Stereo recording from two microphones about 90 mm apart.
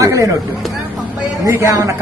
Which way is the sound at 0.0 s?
35° right (ahead or behind).